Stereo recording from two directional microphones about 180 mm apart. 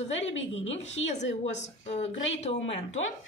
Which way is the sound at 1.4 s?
35° left (ahead or behind).